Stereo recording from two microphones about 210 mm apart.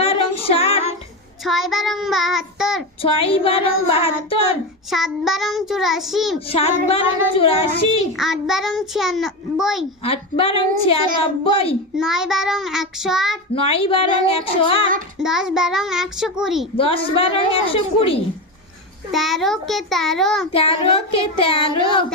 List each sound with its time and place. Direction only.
0.0 s music: 30° left (ahead or behind)
1.5 s a child's voice: centre (ahead or behind)
3.0 s speech: 25° left (ahead or behind)
4.9 s a child's voice: centre (ahead or behind)
6.5 s speech: 25° left (ahead or behind)
8.2 s a child's voice: centre (ahead or behind)
10.0 s speech: 25° left (ahead or behind)
11.9 s a child's voice: 5° right (ahead or behind)
13.6 s speech: 25° left (ahead or behind)
15.2 s a child's voice: centre (ahead or behind)
16.7 s speech: 25° left (ahead or behind)
19.1 s a child's voice: centre (ahead or behind)
20.5 s speech: 25° left (ahead or behind)